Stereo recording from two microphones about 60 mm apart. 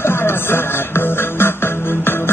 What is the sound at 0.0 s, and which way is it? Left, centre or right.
Music, left.